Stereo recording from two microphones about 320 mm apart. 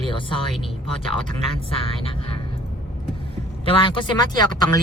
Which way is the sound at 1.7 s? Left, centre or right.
Centre.